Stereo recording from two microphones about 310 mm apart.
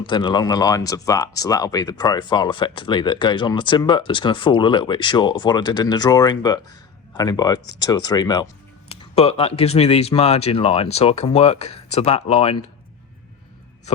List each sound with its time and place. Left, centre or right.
0.0 s speech: centre